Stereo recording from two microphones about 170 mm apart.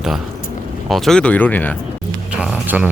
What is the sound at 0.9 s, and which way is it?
Speech, centre (ahead or behind).